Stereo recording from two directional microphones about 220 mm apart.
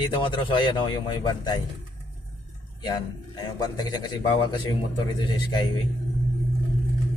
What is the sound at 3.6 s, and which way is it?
Speech, 20° left (ahead or behind).